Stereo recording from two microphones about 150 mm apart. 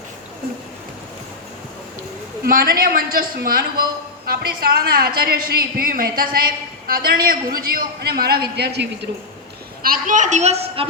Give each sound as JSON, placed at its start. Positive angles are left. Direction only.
{"t": 2.5, "sound": "a man's voice", "side_deg": -75}
{"t": 4.3, "sound": "a woman's voice", "side_deg": -90}
{"t": 9.8, "sound": "a woman's voice", "side_deg": -65}